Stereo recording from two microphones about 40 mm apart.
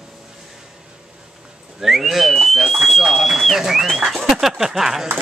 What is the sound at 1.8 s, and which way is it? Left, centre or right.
Whistling, centre.